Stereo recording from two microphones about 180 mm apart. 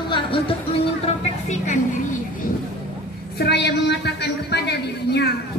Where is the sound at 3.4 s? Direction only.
65° left (ahead or behind).